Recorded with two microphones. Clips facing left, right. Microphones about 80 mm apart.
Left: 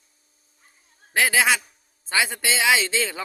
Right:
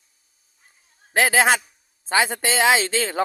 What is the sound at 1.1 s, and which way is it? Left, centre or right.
A man's voice, right.